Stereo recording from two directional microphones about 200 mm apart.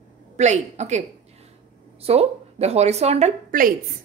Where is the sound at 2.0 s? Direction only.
30° right (ahead or behind).